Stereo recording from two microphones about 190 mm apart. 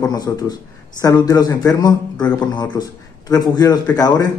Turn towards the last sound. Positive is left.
turn(degrees=20)  # may be behind; listen again after turning